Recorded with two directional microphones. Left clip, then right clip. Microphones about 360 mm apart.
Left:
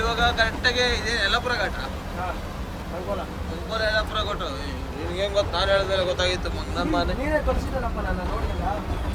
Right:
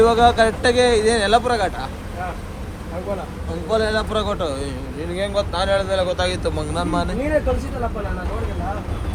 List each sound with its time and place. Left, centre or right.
0.0 s speech: centre
3.7 s speech: centre